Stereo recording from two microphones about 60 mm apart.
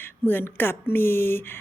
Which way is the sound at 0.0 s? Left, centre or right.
Left.